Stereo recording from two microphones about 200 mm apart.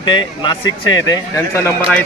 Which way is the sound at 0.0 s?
25° left (ahead or behind).